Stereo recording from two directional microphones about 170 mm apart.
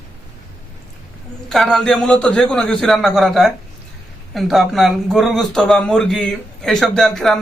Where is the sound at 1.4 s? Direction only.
Centre (ahead or behind).